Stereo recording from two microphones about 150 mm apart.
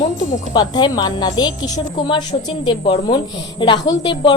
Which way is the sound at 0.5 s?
30° left (ahead or behind).